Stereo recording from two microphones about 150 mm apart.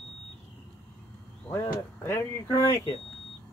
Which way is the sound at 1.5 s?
15° left (ahead or behind).